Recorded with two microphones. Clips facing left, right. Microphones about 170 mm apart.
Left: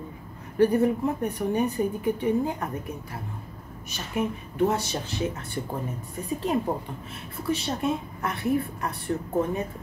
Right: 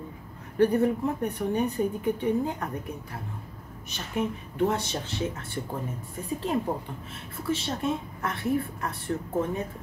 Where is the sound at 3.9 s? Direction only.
5° left (ahead or behind).